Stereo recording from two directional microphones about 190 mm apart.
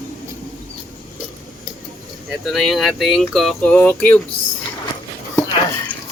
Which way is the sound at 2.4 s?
Centre (ahead or behind).